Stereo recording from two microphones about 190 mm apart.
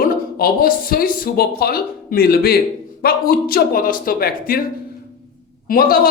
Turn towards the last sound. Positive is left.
turn(degrees=50)  # may be behind; listen again after turning